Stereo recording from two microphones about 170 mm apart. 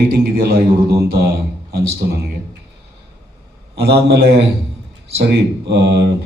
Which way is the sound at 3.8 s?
70° right (ahead or behind).